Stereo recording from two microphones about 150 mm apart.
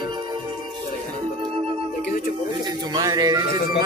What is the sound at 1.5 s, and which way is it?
Music, 40° right (ahead or behind).